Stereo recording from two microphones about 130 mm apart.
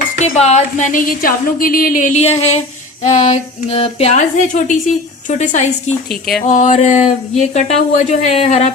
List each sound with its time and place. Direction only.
0.2 s speech: 60° left (ahead or behind)
6.1 s a sound: centre (ahead or behind)
6.4 s speech: 70° left (ahead or behind)